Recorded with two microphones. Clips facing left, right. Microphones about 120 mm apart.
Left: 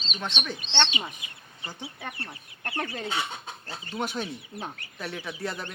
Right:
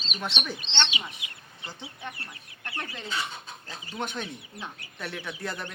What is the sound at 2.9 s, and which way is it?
Speech, 60° left (ahead or behind).